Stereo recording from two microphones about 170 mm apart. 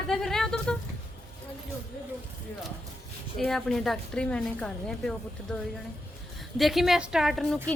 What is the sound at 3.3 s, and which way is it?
A woman's voice, centre (ahead or behind).